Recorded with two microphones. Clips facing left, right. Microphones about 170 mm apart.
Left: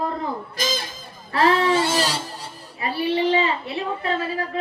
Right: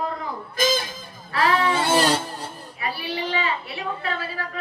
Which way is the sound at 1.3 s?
25° left (ahead or behind).